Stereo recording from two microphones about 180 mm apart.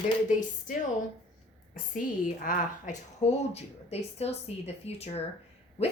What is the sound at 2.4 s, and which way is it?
Speech, 50° left (ahead or behind).